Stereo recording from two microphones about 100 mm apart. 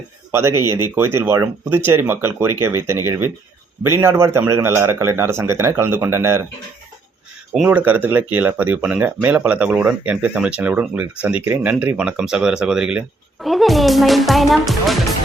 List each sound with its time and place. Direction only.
0.3 s speech: 25° right (ahead or behind)
7.7 s speech: 15° right (ahead or behind); by 14.9 s centre (ahead or behind)